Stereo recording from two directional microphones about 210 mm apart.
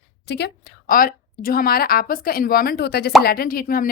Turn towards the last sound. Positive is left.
turn(degrees=45)  # may be behind; listen again after turning